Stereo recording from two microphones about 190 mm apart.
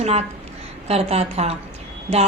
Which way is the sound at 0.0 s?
35° right (ahead or behind).